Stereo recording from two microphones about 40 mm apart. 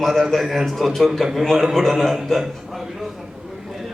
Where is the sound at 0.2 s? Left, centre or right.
Centre.